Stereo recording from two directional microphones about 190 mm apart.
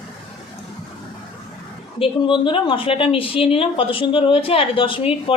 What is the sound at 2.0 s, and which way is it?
A woman's voice, 25° left (ahead or behind).